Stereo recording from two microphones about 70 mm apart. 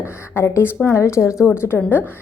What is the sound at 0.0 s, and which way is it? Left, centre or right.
Speech, left.